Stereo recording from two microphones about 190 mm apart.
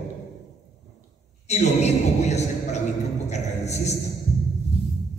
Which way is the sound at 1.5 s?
35° left (ahead or behind).